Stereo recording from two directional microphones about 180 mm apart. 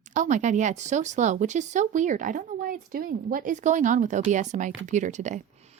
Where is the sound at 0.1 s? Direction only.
45° right (ahead or behind).